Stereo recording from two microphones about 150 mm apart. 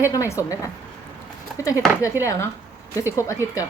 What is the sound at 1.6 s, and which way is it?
Speech, 20° left (ahead or behind).